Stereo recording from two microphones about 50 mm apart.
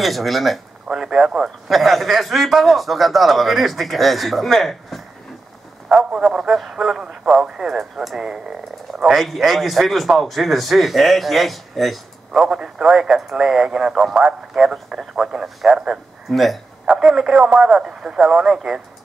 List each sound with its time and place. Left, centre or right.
0.0 s speech: centre
0.9 s speech: centre
1.7 s speech: centre
6.2 s speech: centre
8.3 s speech: centre
9.1 s speech: centre
12.4 s speech: centre